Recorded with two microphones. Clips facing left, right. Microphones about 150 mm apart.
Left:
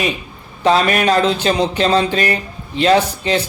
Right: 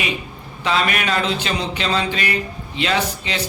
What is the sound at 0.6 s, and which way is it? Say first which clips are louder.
Speech: left 7 dB; 40° left (ahead or behind).